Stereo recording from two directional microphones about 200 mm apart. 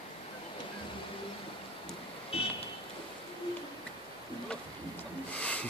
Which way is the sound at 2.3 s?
30° left (ahead or behind).